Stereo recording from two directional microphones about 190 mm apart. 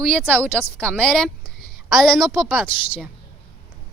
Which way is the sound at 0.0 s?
5° left (ahead or behind).